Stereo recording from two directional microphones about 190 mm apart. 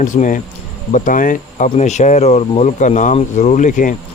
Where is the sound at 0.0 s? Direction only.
45° left (ahead or behind).